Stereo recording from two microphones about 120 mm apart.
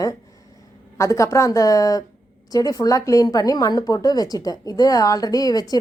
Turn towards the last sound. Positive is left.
turn(degrees=30)  # may be behind; listen again after turning